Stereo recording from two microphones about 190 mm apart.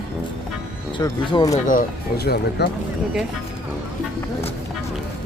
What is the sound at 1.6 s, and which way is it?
Speech, 50° left (ahead or behind).